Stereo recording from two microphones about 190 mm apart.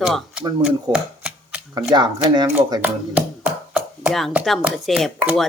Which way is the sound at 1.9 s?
20° right (ahead or behind).